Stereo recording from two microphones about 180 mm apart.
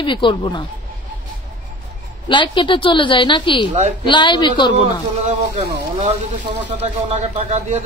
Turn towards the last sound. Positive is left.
turn(degrees=-35)  # may be behind; listen again after turning